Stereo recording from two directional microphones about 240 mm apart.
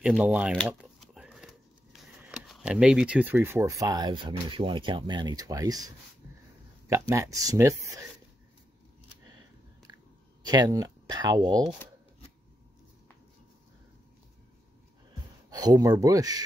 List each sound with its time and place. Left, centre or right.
0.0 s a sound: centre
2.2 s speech: centre
6.9 s speech: centre
10.4 s speech: centre
15.5 s speech: centre